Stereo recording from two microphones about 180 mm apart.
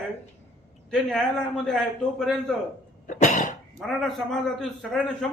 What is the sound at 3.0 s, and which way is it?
Cough, 45° left (ahead or behind).